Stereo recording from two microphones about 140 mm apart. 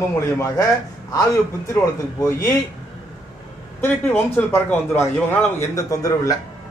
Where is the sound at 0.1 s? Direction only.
25° left (ahead or behind).